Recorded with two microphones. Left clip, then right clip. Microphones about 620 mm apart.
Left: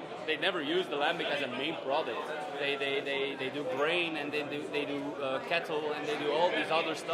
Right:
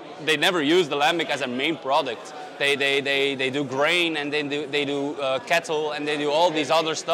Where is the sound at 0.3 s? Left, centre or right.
Right.